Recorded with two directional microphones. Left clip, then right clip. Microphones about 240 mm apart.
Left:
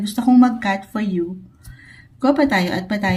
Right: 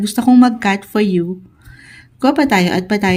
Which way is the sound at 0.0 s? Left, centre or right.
Right.